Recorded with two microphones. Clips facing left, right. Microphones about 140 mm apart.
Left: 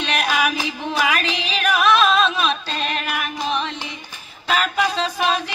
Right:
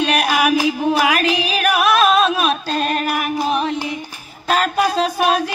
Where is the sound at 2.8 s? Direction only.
45° right (ahead or behind).